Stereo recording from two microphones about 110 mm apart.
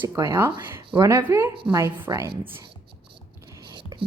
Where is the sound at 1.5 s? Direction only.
55° right (ahead or behind).